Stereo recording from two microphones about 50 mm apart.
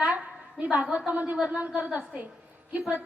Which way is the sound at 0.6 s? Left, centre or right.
Right.